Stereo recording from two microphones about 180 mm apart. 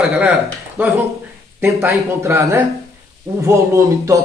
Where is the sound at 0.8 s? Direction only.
10° right (ahead or behind).